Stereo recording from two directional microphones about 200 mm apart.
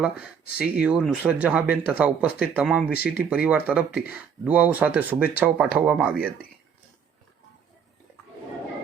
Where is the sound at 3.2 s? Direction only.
5° right (ahead or behind).